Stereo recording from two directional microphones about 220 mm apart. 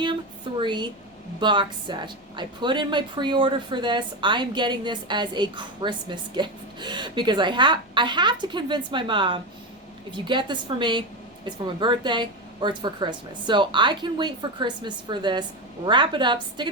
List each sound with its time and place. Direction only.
0.5 s a woman's voice: 20° right (ahead or behind)